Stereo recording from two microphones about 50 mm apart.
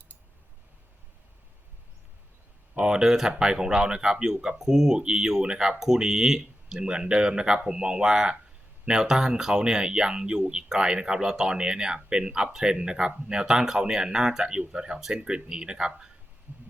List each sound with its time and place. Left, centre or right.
2.8 s speech: centre